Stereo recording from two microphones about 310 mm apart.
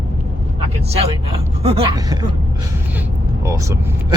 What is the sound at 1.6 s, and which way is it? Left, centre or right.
Speech, centre.